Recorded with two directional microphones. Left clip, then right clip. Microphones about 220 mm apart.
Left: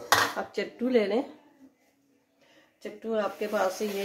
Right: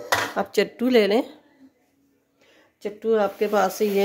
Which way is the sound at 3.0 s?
55° right (ahead or behind).